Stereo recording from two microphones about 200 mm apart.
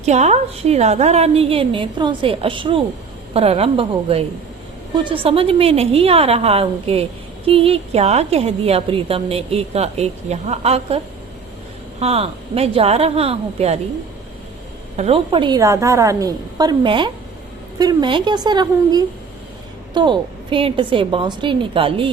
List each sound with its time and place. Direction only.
0.0 s a woman's voice: 35° right (ahead or behind)
14.9 s a woman's voice: 30° right (ahead or behind)